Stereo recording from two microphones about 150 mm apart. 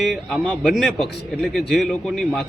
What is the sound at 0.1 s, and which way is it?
Speech, 5° right (ahead or behind).